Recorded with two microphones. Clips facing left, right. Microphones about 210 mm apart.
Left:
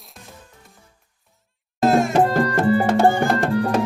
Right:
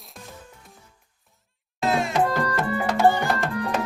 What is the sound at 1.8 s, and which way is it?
Music, 45° left (ahead or behind).